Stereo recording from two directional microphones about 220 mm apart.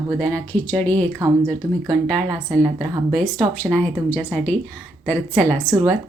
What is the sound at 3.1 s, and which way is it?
Speech, 5° left (ahead or behind).